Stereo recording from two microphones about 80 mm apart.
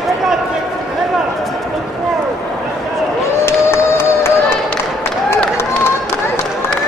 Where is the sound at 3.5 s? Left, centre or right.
Left.